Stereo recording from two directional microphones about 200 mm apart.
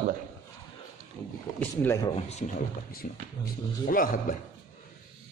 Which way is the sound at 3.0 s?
45° left (ahead or behind).